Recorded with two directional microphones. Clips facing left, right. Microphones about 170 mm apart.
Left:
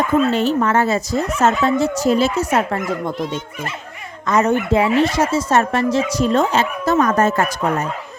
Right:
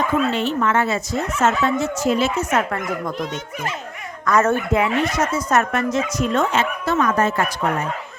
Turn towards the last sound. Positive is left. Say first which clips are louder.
# left 3 dB
turn(degrees=45)  # may be behind; listen again after turning